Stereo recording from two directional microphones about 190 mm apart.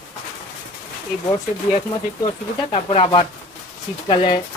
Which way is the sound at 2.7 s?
30° left (ahead or behind).